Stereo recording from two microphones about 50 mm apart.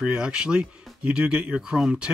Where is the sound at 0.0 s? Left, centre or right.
Centre.